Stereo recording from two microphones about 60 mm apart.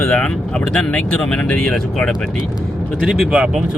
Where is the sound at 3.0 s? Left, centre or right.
Centre.